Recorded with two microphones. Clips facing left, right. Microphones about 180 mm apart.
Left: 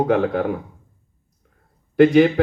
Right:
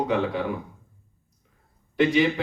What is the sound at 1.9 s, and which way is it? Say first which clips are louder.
Speech: left 8 dB; 55° left (ahead or behind).